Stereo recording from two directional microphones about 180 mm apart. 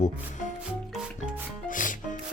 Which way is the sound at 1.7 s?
45° left (ahead or behind).